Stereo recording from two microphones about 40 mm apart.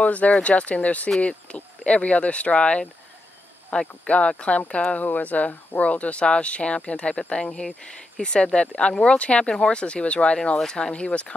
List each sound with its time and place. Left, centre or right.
0.0 s speech: left
4.0 s speech: left
4.9 s speech: left